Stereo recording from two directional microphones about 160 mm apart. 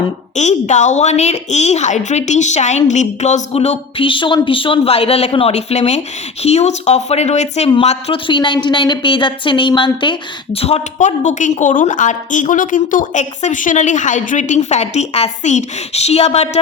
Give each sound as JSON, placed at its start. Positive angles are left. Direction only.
{"t": 0.3, "sound": "a woman's voice", "side_deg": 45}